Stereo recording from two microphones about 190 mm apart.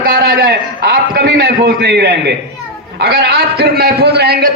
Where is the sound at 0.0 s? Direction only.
55° right (ahead or behind).